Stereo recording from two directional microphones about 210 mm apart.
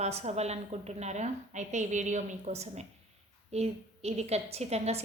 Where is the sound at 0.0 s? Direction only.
30° right (ahead or behind).